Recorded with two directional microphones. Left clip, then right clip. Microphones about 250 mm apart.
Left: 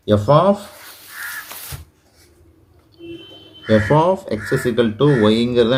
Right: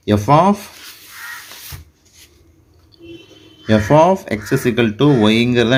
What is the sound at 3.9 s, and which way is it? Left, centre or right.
Speech, right.